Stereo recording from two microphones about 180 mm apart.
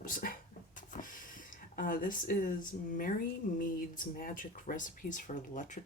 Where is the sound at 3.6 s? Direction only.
50° left (ahead or behind).